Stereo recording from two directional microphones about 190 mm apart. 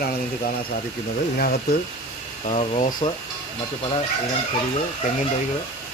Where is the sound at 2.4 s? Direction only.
35° left (ahead or behind).